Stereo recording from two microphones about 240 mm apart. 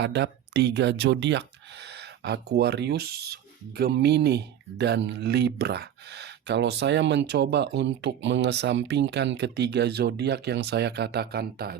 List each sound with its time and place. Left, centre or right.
0.0 s speech: right